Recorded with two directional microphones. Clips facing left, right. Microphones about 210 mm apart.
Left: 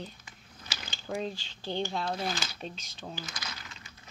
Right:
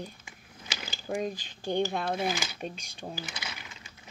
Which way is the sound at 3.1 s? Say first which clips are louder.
Right 2 dB; 10° right (ahead or behind).